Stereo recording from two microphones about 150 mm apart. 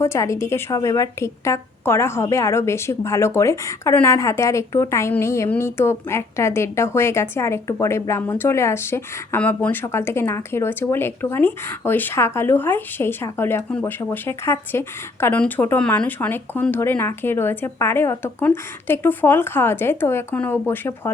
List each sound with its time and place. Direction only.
0.0 s a woman's voice: 20° left (ahead or behind)